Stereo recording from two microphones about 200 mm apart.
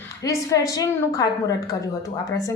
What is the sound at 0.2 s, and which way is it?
A woman's voice, 15° left (ahead or behind).